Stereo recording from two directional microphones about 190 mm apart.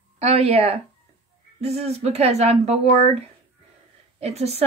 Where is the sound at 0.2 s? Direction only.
30° right (ahead or behind).